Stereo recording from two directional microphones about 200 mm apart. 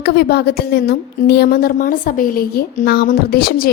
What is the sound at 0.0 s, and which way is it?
A woman's voice, 55° left (ahead or behind).